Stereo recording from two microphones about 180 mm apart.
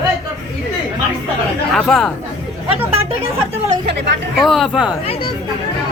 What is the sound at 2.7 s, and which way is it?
Chatter, 35° right (ahead or behind).